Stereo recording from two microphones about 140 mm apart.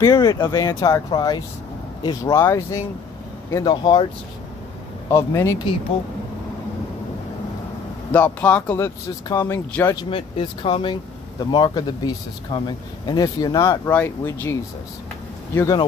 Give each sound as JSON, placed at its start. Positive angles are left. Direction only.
{"t": 0.0, "sound": "speech", "side_deg": 25}
{"t": 3.6, "sound": "speech", "side_deg": 35}
{"t": 5.1, "sound": "speech", "side_deg": 20}
{"t": 8.1, "sound": "speech", "side_deg": 10}
{"t": 10.0, "sound": "speech", "side_deg": 40}
{"t": 15.5, "sound": "speech", "side_deg": 25}